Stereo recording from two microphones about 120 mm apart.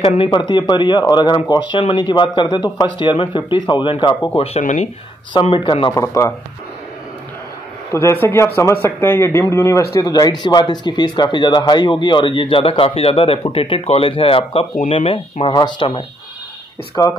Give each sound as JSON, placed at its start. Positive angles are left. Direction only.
{"t": 0.0, "sound": "a man's voice", "side_deg": 50}
{"t": 4.4, "sound": "speech", "side_deg": 70}
{"t": 5.3, "sound": "a man's voice", "side_deg": 45}
{"t": 7.9, "sound": "a man's voice", "side_deg": 20}
{"t": 16.9, "sound": "a man's voice", "side_deg": 35}